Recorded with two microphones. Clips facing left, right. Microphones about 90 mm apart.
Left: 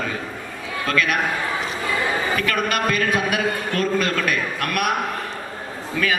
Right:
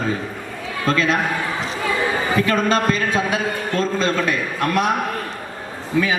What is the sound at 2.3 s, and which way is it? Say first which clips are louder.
A man's voice: right 4 dB; 25° right (ahead or behind).